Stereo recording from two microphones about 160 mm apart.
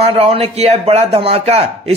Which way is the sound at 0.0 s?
40° right (ahead or behind).